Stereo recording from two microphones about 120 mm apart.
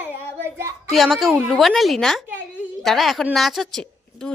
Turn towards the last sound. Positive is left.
turn(degrees=5)  # may be behind; listen again after turning